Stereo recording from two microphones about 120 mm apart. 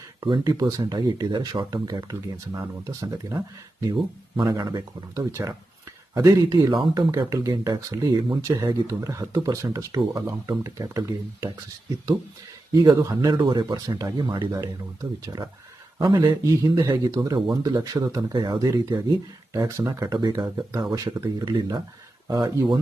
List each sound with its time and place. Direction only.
0.2 s speech: 30° right (ahead or behind)
13.3 s speech: 40° right (ahead or behind)
16.0 s speech: 35° right (ahead or behind)
18.6 s speech: 25° right (ahead or behind)
22.3 s speech: 30° right (ahead or behind)